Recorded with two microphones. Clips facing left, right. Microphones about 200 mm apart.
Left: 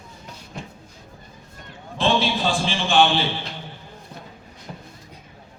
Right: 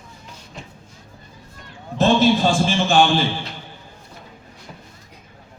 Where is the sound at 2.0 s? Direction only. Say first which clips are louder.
Right 6 dB; 45° right (ahead or behind).